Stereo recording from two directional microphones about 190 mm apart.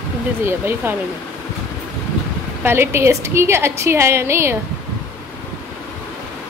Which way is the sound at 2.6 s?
15° right (ahead or behind).